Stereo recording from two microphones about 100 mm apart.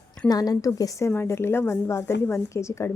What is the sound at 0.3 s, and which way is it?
A woman's voice, 40° left (ahead or behind).